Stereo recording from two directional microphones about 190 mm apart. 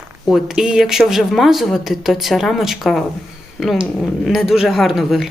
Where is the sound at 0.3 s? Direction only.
Centre (ahead or behind).